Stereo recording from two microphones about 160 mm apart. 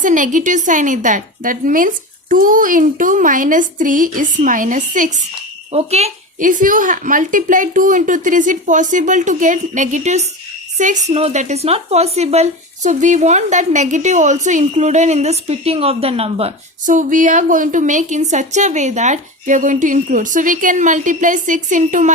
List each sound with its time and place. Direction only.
0.0 s a woman's voice: 55° right (ahead or behind)
5.7 s a woman's voice: 40° right (ahead or behind)
16.8 s a woman's voice: 55° right (ahead or behind)